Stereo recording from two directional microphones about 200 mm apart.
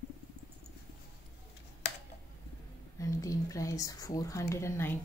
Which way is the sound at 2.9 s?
15° left (ahead or behind).